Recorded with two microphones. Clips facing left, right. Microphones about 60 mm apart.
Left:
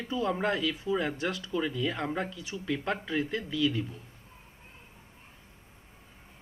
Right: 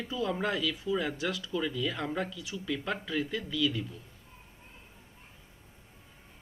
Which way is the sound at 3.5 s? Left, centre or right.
Centre.